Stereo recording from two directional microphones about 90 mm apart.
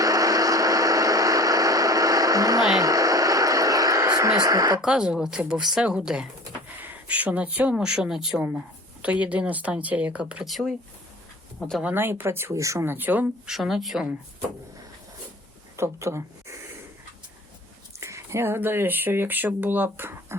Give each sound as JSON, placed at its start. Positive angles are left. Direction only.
{"t": 0.0, "sound": "vehicle", "side_deg": -40}
{"t": 2.7, "sound": "a sound", "side_deg": -40}
{"t": 4.8, "sound": "speech", "side_deg": -10}
{"t": 8.4, "sound": "speech", "side_deg": -15}
{"t": 10.4, "sound": "speech", "side_deg": 0}
{"t": 11.9, "sound": "speech", "side_deg": -25}
{"t": 13.5, "sound": "speech", "side_deg": -5}
{"t": 15.7, "sound": "speech", "side_deg": -35}
{"t": 18.0, "sound": "speech", "side_deg": -30}